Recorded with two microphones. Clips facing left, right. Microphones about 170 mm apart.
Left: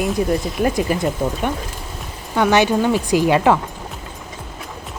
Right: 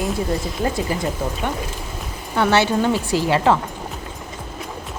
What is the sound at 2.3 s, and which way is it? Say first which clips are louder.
Speech: left 2 dB; 15° left (ahead or behind).